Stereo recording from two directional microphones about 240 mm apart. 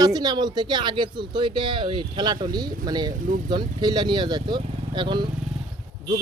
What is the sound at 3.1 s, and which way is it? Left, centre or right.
Speech, right.